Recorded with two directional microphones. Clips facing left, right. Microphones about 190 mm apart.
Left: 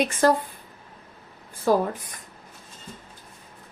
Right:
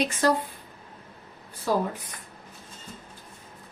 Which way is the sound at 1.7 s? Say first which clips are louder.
Left 5 dB; 50° left (ahead or behind).